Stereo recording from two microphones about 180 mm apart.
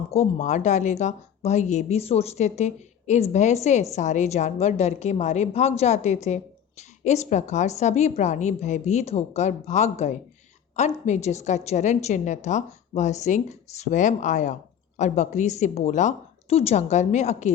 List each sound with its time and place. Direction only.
0.1 s a woman's voice: 40° left (ahead or behind)